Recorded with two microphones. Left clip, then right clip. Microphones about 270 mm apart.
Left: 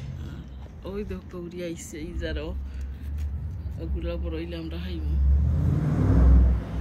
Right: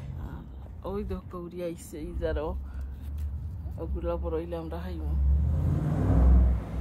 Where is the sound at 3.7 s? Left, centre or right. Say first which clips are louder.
Right 2 dB; centre.